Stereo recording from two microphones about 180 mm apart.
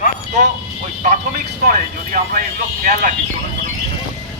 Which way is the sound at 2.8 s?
50° right (ahead or behind).